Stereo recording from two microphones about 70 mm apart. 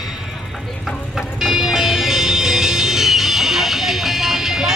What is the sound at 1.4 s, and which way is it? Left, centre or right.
Music, centre.